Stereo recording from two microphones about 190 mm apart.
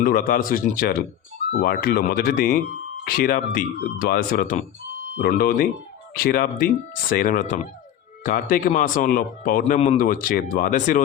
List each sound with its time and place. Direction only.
0.0 s speech: 50° left (ahead or behind)